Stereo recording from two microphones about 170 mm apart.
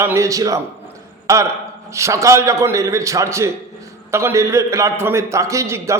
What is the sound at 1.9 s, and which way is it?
A man's voice, 15° right (ahead or behind).